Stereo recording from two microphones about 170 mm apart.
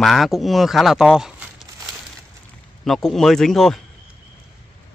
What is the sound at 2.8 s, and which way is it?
Speech, centre (ahead or behind).